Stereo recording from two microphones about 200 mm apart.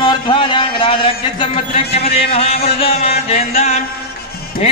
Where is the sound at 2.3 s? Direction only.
30° left (ahead or behind).